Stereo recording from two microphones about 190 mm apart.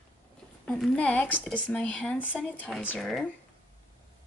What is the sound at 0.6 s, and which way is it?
Speech, centre (ahead or behind).